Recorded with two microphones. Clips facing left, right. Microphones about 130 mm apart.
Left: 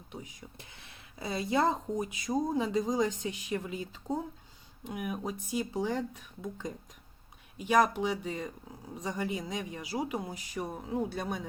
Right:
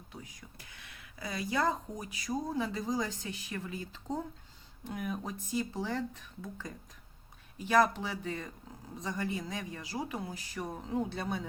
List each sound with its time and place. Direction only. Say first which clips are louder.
0.8 s speech: left 2 dB; 25° left (ahead or behind)